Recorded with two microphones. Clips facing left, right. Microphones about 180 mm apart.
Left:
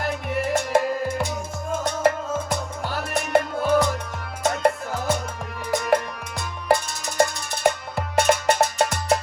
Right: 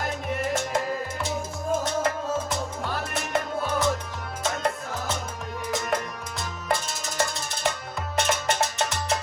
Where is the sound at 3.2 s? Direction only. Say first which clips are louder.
Left 8 dB; 55° left (ahead or behind).